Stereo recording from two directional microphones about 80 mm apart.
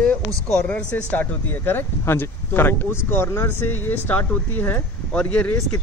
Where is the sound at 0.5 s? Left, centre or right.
Centre.